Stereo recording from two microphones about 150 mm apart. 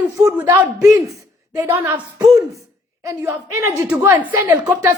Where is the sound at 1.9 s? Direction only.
25° right (ahead or behind).